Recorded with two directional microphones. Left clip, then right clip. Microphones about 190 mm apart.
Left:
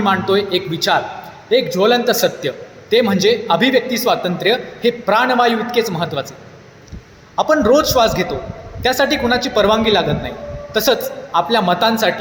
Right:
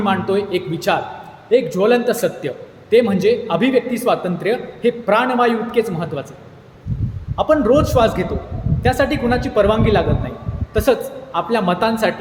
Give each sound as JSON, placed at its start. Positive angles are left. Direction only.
{"t": 0.0, "sound": "a man's voice", "side_deg": -15}
{"t": 7.3, "sound": "a man's voice", "side_deg": -15}